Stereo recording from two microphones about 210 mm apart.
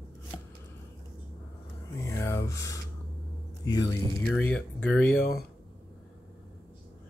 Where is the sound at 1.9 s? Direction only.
15° left (ahead or behind).